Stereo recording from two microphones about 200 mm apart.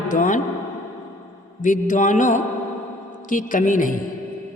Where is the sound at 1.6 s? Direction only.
40° left (ahead or behind).